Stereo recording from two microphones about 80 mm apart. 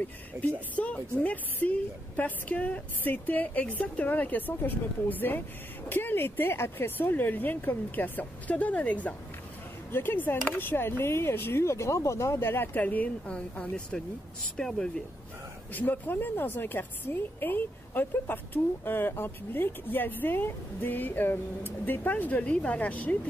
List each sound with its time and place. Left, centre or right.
0.4 s a woman's voice: centre
15.7 s a woman's voice: left